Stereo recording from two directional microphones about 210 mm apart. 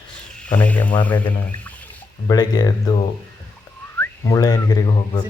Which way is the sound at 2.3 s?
20° left (ahead or behind).